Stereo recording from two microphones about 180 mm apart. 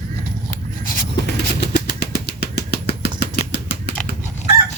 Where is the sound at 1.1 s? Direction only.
65° left (ahead or behind).